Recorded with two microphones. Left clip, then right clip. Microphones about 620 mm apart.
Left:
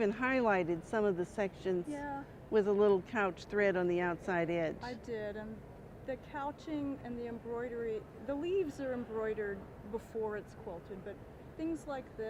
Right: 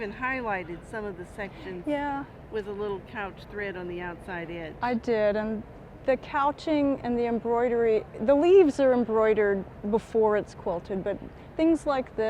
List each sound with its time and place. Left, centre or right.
0.0 s a woman's voice: left
1.9 s speech: right
2.5 s speech: left
4.8 s speech: right